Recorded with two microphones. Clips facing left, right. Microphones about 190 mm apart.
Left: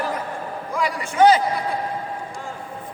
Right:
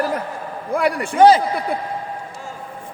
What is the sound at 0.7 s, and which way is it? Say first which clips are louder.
Speech: right 6 dB; 55° right (ahead or behind).